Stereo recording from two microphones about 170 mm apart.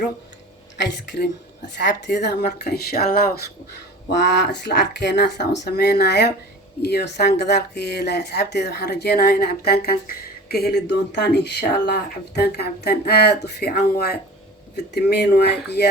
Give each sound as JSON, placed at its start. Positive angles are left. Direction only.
{"t": 0.8, "sound": "a woman's voice", "side_deg": 90}
{"t": 2.6, "sound": "speech", "side_deg": 65}
{"t": 4.1, "sound": "speech", "side_deg": 85}